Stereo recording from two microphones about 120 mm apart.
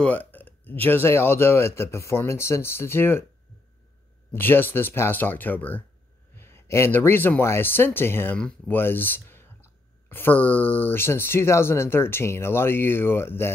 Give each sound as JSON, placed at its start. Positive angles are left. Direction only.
{"t": 0.0, "sound": "speech", "side_deg": 15}
{"t": 4.3, "sound": "speech", "side_deg": 15}